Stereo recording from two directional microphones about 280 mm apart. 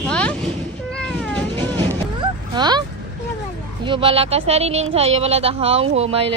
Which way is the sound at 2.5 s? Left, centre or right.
Centre.